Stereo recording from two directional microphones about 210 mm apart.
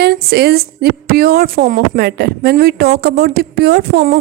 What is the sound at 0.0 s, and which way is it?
A woman's voice, 50° right (ahead or behind).